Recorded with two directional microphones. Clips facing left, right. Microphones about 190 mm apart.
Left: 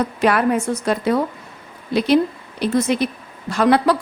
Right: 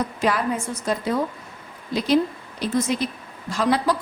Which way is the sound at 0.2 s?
65° left (ahead or behind).